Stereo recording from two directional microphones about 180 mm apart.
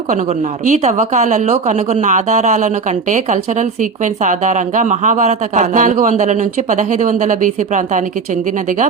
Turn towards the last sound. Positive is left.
turn(degrees=-45)  # may be behind; listen again after turning